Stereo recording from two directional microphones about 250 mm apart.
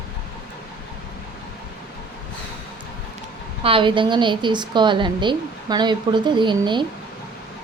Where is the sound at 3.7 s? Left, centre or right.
Right.